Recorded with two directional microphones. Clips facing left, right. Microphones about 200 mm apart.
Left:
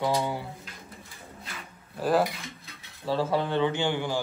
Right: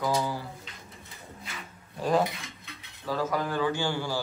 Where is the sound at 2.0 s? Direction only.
5° left (ahead or behind).